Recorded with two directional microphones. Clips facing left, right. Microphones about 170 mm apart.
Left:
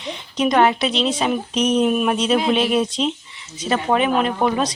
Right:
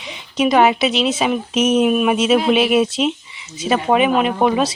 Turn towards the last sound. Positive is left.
turn(degrees=-10)  # may be behind; listen again after turning